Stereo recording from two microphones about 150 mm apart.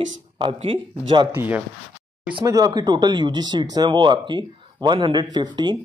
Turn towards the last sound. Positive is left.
turn(degrees=-30)  # may be behind; listen again after turning